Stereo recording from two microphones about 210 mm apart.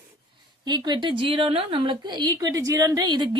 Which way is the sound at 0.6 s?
20° right (ahead or behind).